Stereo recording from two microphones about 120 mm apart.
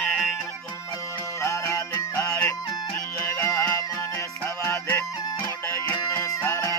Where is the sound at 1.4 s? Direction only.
25° left (ahead or behind).